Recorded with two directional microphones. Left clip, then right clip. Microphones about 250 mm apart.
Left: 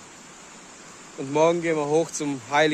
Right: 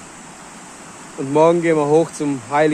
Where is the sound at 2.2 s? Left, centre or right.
Centre.